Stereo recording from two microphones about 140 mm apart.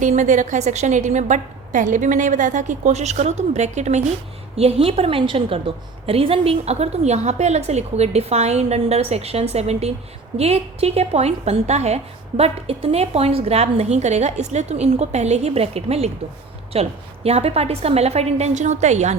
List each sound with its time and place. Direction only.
0.0 s a woman's voice: 60° right (ahead or behind)